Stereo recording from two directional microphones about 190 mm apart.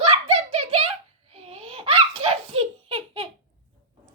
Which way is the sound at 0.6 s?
35° right (ahead or behind).